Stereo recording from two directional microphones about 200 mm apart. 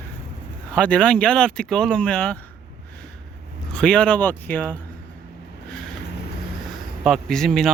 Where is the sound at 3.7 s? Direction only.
5° left (ahead or behind).